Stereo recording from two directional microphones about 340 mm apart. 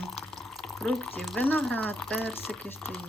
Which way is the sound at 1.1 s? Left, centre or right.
Centre.